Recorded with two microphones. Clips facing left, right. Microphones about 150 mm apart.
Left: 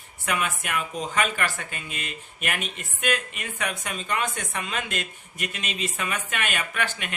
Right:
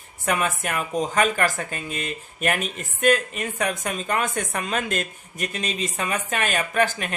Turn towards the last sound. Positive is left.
turn(degrees=-40)  # may be behind; listen again after turning